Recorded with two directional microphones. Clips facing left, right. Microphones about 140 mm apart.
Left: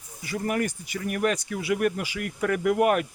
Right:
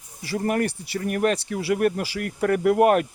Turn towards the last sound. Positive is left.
turn(degrees=-35)  # may be behind; listen again after turning